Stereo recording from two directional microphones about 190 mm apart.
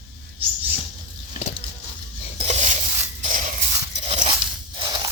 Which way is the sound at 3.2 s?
40° right (ahead or behind).